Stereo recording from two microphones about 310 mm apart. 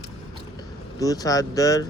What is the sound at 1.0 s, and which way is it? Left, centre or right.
Speech, centre.